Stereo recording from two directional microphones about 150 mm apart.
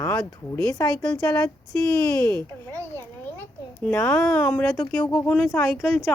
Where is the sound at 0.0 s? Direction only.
20° left (ahead or behind).